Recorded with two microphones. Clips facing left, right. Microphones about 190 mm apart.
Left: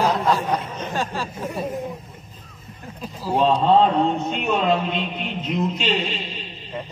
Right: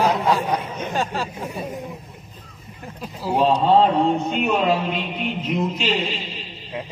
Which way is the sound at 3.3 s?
Centre (ahead or behind).